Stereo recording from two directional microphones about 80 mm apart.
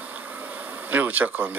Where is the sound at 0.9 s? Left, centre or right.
Right.